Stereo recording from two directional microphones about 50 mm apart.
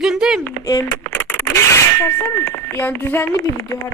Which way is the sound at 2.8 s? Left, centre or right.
Left.